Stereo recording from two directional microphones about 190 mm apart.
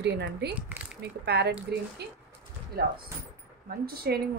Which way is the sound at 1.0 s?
60° right (ahead or behind).